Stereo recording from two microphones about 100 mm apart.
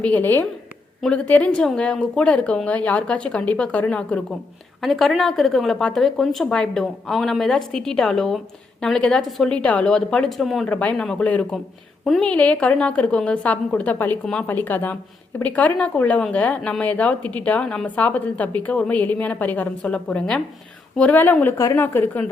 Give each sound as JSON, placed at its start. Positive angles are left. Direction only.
{"t": 0.0, "sound": "speech", "side_deg": 15}
{"t": 4.8, "sound": "speech", "side_deg": 0}
{"t": 10.7, "sound": "speech", "side_deg": 15}
{"t": 12.0, "sound": "speech", "side_deg": 0}
{"t": 12.3, "sound": "speech", "side_deg": 15}